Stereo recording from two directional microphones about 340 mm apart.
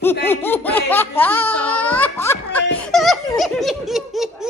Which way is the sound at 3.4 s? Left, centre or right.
Centre.